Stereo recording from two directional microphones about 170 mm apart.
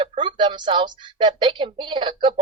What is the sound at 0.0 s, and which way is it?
A woman's voice, 30° right (ahead or behind).